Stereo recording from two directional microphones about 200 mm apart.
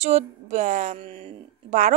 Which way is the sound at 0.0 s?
35° right (ahead or behind).